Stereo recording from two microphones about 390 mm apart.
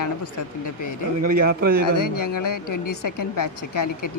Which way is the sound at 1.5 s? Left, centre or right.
Right.